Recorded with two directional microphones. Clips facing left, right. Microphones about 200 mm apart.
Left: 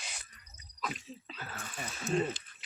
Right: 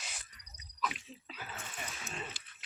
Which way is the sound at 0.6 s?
40° left (ahead or behind).